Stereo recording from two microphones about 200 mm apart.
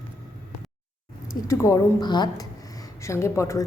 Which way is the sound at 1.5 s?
15° left (ahead or behind).